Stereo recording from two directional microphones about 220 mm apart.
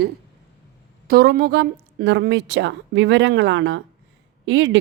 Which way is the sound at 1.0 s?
45° right (ahead or behind).